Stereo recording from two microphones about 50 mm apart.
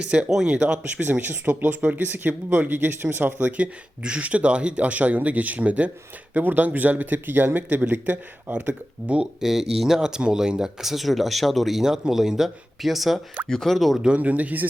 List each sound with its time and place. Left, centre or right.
0.1 s speech: centre
0.8 s speech: right
1.8 s speech: right
9.4 s speech: centre
13.5 s speech: centre
14.2 s speech: right